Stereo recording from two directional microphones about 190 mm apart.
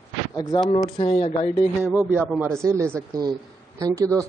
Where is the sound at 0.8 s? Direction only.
30° left (ahead or behind).